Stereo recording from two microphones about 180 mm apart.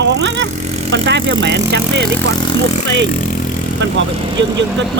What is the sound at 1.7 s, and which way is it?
Speech, 65° right (ahead or behind).